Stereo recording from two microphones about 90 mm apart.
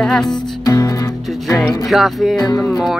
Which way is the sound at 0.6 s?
40° left (ahead or behind).